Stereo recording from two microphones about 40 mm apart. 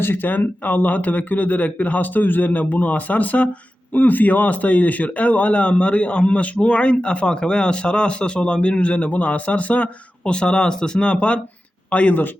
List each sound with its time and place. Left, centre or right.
0.0 s speech: left
10.3 s speech: left